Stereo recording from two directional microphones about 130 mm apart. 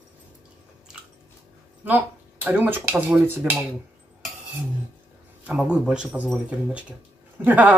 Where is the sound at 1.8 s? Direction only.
15° right (ahead or behind).